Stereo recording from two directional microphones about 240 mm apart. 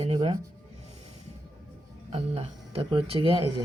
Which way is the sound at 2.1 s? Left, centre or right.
Right.